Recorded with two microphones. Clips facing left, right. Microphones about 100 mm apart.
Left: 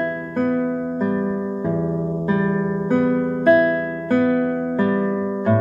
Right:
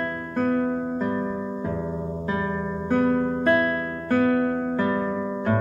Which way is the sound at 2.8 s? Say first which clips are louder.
Left 2 dB; 10° left (ahead or behind).